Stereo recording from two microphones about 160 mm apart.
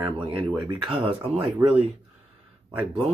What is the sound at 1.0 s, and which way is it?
Speech, 40° right (ahead or behind).